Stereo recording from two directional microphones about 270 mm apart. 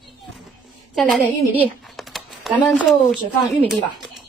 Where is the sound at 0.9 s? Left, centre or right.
Centre.